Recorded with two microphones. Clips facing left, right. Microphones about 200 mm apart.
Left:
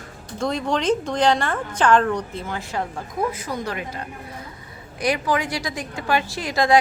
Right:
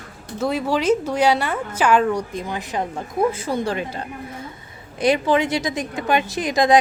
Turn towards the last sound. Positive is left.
turn(degrees=-20)  # may be behind; listen again after turning